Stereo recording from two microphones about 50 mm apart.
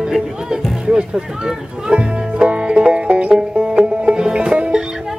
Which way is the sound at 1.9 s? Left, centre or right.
Right.